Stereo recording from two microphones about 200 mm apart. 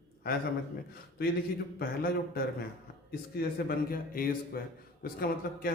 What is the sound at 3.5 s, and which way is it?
A man's voice, 45° left (ahead or behind).